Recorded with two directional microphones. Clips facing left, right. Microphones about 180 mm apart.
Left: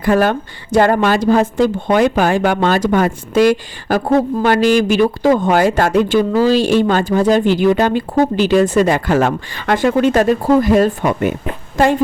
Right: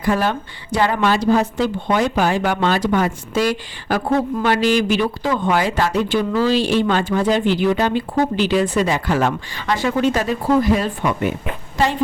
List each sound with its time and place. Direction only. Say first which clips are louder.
0.0 s a woman's voice: left 5 dB; 55° left (ahead or behind)